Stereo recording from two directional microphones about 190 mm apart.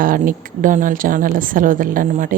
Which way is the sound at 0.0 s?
45° right (ahead or behind).